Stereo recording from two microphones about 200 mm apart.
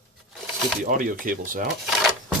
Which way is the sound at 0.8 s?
45° right (ahead or behind).